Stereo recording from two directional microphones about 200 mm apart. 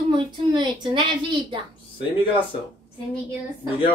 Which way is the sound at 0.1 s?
20° right (ahead or behind).